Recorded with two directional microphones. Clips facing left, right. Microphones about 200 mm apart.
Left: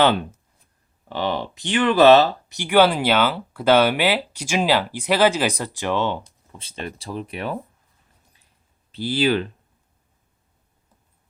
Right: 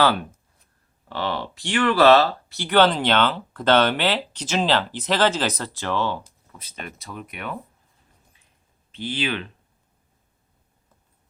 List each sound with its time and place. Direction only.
0.0 s speech: 20° left (ahead or behind)
8.9 s speech: 35° left (ahead or behind)